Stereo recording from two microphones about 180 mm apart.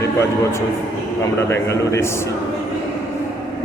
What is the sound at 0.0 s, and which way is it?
A man's voice, 15° left (ahead or behind).